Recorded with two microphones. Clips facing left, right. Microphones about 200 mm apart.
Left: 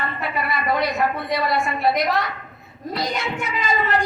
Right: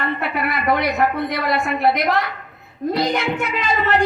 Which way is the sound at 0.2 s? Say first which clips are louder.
Right 2 dB; 60° right (ahead or behind).